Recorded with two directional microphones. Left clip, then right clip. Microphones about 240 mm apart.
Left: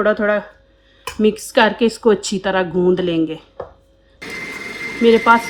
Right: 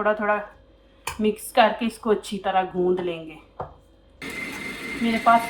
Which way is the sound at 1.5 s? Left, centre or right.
Left.